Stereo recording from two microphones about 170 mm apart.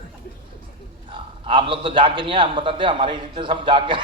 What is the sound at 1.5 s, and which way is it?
A man's voice, 30° right (ahead or behind).